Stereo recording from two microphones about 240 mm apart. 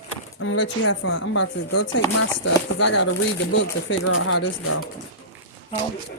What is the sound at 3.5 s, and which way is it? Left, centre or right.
Speech, left.